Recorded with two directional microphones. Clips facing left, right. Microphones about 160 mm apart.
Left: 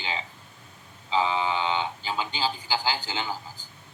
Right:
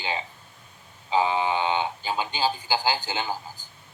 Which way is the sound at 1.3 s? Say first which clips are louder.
Right 2 dB; 20° right (ahead or behind).